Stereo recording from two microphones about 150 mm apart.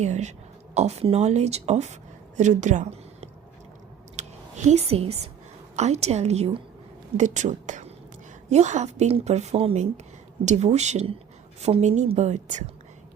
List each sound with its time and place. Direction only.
0.0 s speech: 50° right (ahead or behind)
4.2 s a sound: 50° right (ahead or behind)
5.7 s a woman's voice: 50° right (ahead or behind)